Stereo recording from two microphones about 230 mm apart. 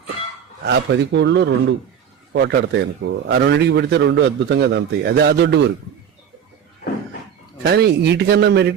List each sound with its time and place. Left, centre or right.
0.6 s a man's voice: right
7.6 s a man's voice: right